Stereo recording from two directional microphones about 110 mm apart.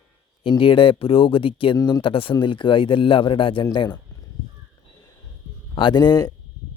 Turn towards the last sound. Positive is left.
turn(degrees=40)  # may be behind; listen again after turning